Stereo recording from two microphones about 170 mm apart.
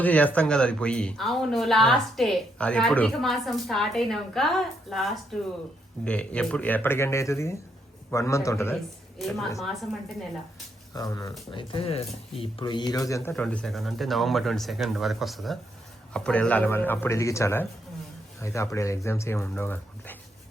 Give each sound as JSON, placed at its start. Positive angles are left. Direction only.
{"t": 0.0, "sound": "speech", "side_deg": 10}
{"t": 9.1, "sound": "speech", "side_deg": 0}
{"t": 10.9, "sound": "speech", "side_deg": 20}
{"t": 11.5, "sound": "speech", "side_deg": 35}
{"t": 13.3, "sound": "speech", "side_deg": 5}